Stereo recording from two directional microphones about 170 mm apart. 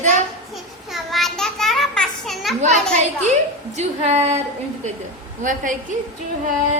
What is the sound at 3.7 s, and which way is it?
Speech, 40° right (ahead or behind).